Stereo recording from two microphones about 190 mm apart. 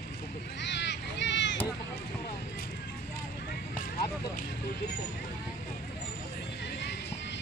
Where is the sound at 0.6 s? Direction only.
65° left (ahead or behind).